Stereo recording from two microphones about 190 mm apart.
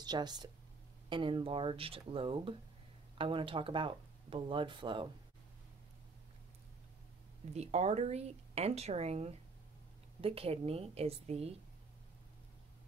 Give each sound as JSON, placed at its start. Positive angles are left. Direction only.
{"t": 0.0, "sound": "speech", "side_deg": -20}
{"t": 7.5, "sound": "speech", "side_deg": -35}